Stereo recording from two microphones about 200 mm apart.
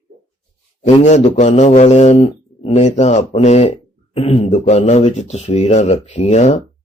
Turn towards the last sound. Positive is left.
turn(degrees=35)  # may be behind; listen again after turning